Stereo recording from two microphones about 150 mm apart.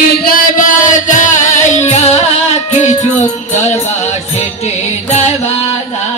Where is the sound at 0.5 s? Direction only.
60° left (ahead or behind).